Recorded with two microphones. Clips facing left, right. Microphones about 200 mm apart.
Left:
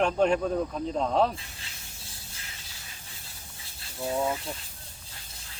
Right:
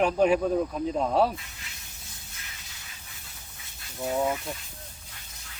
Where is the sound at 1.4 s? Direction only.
30° left (ahead or behind).